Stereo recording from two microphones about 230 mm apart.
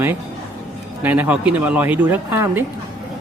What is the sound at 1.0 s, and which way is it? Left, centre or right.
Speech, centre.